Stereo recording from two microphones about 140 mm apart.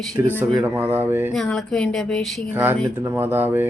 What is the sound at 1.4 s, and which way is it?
Speech, 5° left (ahead or behind).